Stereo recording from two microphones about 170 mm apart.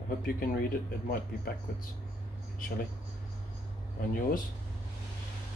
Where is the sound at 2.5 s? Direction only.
55° left (ahead or behind).